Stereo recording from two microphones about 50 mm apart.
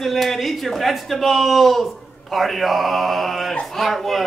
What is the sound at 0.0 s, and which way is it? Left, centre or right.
A man's voice, centre.